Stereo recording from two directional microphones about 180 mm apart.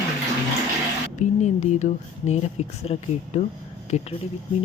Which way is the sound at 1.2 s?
40° left (ahead or behind).